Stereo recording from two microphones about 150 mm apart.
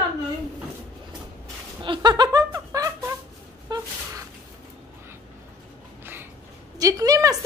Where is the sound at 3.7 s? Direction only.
30° right (ahead or behind).